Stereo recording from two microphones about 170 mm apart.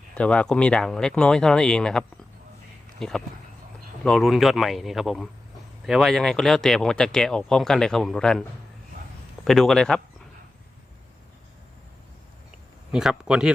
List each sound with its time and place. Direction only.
0.1 s speech: 5° left (ahead or behind)
12.9 s speech: 5° right (ahead or behind)